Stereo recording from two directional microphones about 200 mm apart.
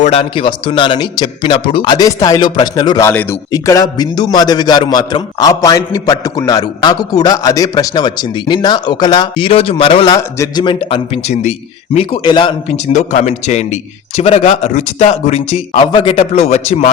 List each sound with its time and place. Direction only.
0.0 s speech: 30° left (ahead or behind)
12.9 s speech: 40° left (ahead or behind)